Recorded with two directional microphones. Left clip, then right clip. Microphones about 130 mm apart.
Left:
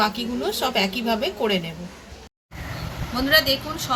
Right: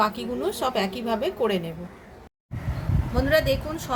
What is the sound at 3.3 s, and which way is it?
Speech, 50° right (ahead or behind).